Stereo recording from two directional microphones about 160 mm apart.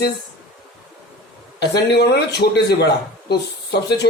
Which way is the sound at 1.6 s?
90° left.